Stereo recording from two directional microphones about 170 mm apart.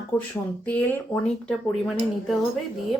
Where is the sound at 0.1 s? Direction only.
10° left (ahead or behind).